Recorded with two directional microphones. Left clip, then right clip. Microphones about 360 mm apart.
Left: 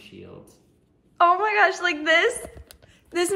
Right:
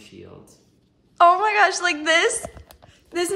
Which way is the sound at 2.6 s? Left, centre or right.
Centre.